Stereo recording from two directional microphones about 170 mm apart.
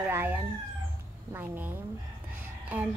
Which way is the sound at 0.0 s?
10° right (ahead or behind).